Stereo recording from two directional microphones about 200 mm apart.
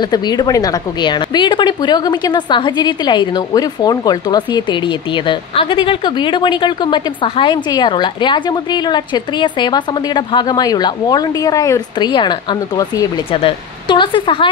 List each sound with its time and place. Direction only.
0.1 s a woman's voice: 20° left (ahead or behind)